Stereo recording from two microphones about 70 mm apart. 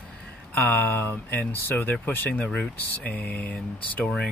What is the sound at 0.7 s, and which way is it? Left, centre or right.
Speech, left.